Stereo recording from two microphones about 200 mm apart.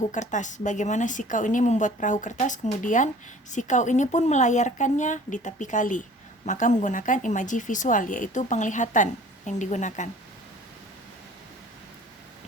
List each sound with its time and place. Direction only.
0.1 s a woman's voice: 40° left (ahead or behind)